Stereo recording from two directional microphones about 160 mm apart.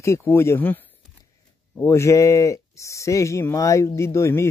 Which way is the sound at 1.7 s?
15° left (ahead or behind).